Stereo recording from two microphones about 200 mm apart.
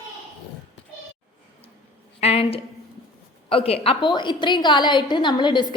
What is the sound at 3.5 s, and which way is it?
A woman's voice, 30° left (ahead or behind).